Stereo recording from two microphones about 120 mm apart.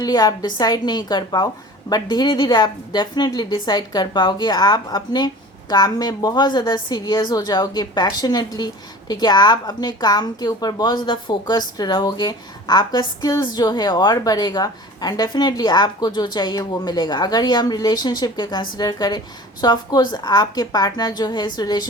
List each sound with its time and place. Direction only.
0.0 s a woman's voice: 35° left (ahead or behind)